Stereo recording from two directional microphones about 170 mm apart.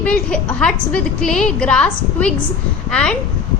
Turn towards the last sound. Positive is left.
turn(degrees=5)  # may be behind; listen again after turning